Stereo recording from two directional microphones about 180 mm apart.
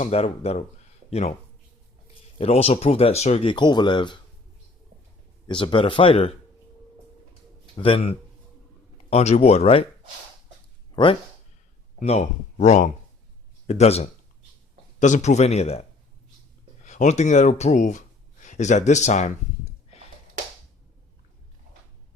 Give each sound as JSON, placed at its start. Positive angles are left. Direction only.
{"t": 0.0, "sound": "speech", "side_deg": 35}
{"t": 2.4, "sound": "speech", "side_deg": 35}
{"t": 5.5, "sound": "speech", "side_deg": 30}
{"t": 7.8, "sound": "speech", "side_deg": 30}
{"t": 10.9, "sound": "speech", "side_deg": 30}
{"t": 16.8, "sound": "speech", "side_deg": 40}